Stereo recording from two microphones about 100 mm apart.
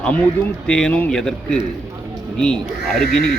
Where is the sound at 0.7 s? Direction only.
10° left (ahead or behind).